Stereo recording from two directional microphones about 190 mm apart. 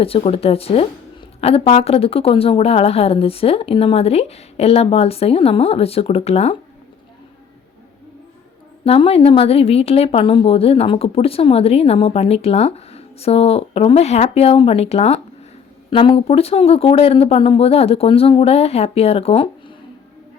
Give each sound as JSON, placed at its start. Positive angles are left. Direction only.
{"t": 0.0, "sound": "a woman's voice", "side_deg": 30}
{"t": 8.8, "sound": "a woman's voice", "side_deg": 30}